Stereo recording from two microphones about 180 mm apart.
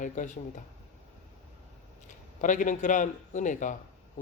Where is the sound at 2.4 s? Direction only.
45° left (ahead or behind).